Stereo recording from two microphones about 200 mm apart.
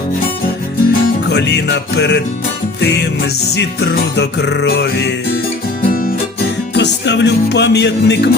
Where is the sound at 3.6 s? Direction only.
60° left (ahead or behind).